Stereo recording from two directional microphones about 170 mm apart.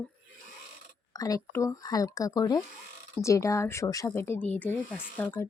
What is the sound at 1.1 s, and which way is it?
A woman's voice, 20° left (ahead or behind).